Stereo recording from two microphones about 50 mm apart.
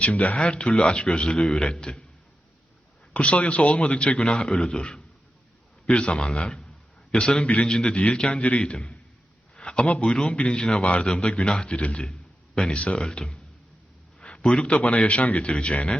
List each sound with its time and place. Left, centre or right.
0.0 s speech: left
3.1 s a man's voice: left